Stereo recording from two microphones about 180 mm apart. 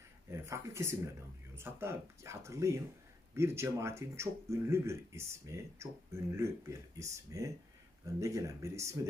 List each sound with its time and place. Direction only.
0.3 s speech: 15° right (ahead or behind)